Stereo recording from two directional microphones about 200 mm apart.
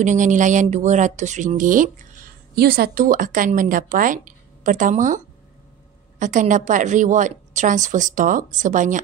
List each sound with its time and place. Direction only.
0.0 s a woman's voice: 40° right (ahead or behind)